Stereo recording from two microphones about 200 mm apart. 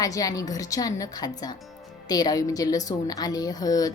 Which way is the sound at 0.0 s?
15° left (ahead or behind).